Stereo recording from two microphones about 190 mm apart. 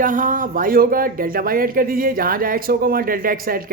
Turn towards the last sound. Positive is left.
turn(degrees=-50)  # may be behind; listen again after turning